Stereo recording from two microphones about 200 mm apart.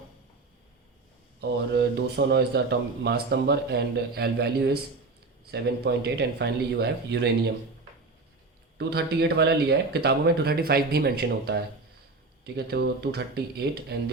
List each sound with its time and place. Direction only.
1.4 s a man's voice: 55° right (ahead or behind)
8.8 s speech: 55° right (ahead or behind)